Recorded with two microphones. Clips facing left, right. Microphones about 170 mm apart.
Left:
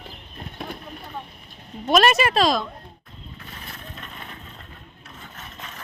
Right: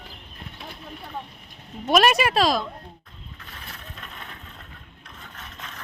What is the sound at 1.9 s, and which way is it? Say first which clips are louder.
Speech: left 1 dB; 10° right (ahead or behind).